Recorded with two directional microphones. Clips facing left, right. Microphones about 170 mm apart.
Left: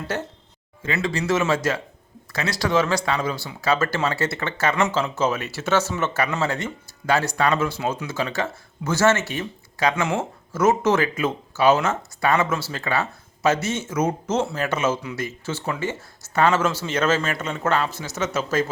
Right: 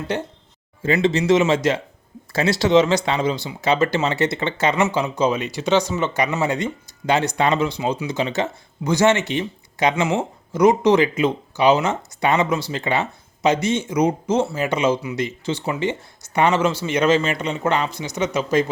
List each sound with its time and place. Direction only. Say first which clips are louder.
0.9 s speech: right 6 dB; 20° right (ahead or behind)